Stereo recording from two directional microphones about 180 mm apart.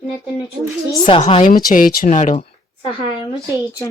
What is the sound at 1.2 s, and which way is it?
Speech, 45° left (ahead or behind).